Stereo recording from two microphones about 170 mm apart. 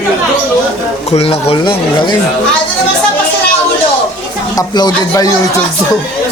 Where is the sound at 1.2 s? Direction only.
35° left (ahead or behind).